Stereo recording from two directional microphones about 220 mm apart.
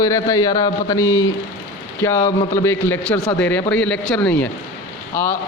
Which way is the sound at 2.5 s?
10° left (ahead or behind).